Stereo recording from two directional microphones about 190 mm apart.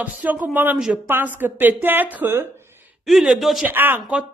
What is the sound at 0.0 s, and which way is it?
A woman's voice, 10° right (ahead or behind).